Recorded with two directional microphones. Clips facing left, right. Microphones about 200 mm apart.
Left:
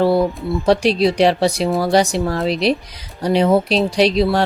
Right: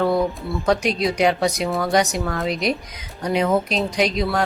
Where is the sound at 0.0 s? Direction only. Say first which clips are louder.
Left 4 dB; 30° left (ahead or behind).